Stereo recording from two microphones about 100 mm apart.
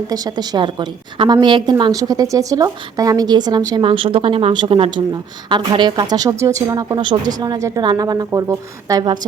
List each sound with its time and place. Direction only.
0.1 s a woman's voice: 45° right (ahead or behind)
1.9 s a woman's voice: 35° right (ahead or behind)
3.8 s speech: 60° right (ahead or behind)
5.5 s a woman's voice: 50° right (ahead or behind); by 9.0 s 35° right (ahead or behind)